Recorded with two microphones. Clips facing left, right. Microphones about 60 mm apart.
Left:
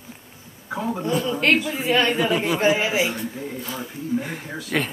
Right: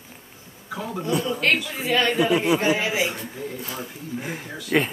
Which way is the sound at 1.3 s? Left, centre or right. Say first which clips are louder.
Left 3 dB; left.